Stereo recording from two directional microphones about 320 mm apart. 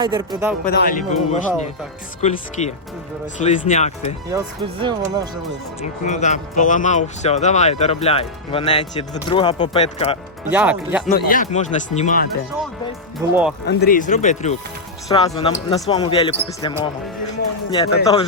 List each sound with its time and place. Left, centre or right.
0.0 s speech: centre
0.6 s speech: left
4.3 s speech: centre
5.8 s speech: left
10.5 s speech: centre
11.1 s speech: left
13.2 s speech: centre
13.7 s speech: left